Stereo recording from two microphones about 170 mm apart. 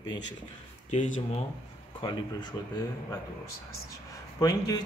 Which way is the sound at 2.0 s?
25° left (ahead or behind).